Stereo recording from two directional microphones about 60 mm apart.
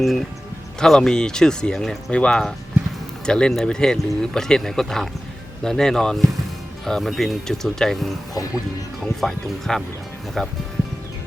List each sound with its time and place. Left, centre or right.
0.0 s speech: centre
2.0 s speech: centre
9.2 s speech: centre